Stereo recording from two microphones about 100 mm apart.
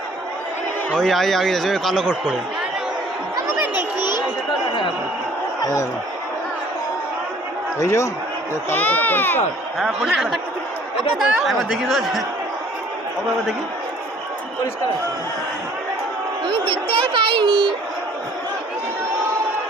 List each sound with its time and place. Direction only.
0.9 s speech: 5° left (ahead or behind)
7.8 s a man's voice: 30° left (ahead or behind)
8.7 s speech: 20° left (ahead or behind)
9.7 s speech: centre (ahead or behind)
11.4 s speech: centre (ahead or behind)
16.5 s speech: 60° right (ahead or behind)